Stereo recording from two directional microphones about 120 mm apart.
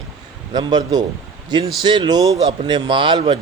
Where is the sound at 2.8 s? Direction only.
45° right (ahead or behind).